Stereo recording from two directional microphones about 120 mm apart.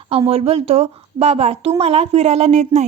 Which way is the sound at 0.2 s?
55° right (ahead or behind).